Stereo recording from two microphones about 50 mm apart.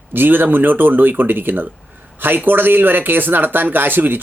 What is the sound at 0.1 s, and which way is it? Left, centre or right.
Speech, right.